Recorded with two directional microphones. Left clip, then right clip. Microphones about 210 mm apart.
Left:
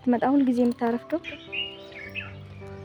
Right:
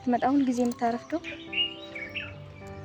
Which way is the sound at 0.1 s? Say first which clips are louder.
Left 2 dB; 50° left (ahead or behind).